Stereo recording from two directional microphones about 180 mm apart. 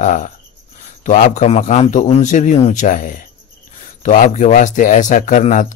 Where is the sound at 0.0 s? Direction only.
45° left (ahead or behind).